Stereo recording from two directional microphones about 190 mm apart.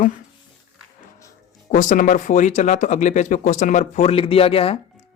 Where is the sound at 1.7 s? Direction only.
45° left (ahead or behind).